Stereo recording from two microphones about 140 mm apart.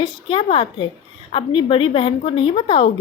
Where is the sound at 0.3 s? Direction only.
40° left (ahead or behind).